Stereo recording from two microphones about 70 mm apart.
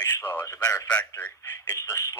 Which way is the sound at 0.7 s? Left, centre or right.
Centre.